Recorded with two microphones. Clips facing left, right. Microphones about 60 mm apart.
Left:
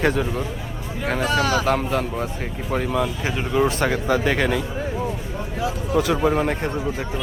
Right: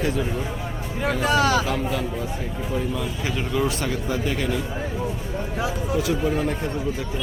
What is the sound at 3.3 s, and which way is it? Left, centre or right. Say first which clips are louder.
Speech: left 4 dB; left.